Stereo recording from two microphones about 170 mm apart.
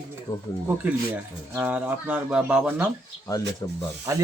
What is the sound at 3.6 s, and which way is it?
Speech, 15° left (ahead or behind).